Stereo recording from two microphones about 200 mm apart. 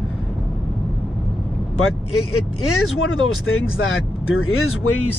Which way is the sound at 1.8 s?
90° left.